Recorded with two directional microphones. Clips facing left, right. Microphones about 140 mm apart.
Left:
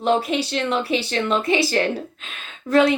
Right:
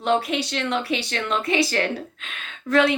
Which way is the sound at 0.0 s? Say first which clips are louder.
Left 2 dB; 35° left (ahead or behind).